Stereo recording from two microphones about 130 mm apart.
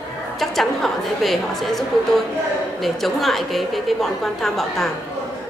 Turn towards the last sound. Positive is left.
turn(degrees=0)  # may be behind; listen again after turning